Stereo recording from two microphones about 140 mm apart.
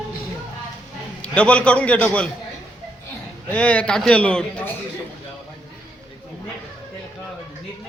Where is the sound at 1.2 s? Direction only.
10° left (ahead or behind).